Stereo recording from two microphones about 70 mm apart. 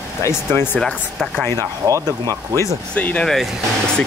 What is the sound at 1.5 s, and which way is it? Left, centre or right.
Speech, right.